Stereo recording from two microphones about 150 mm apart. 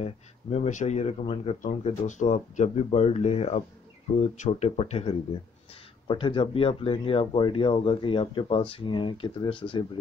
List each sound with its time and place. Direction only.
0.0 s speech: 45° left (ahead or behind)
1.8 s speech: 50° left (ahead or behind); by 9.8 s 35° left (ahead or behind)